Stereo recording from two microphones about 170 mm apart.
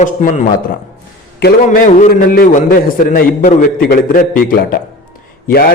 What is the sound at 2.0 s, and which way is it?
A man's voice, 55° left (ahead or behind).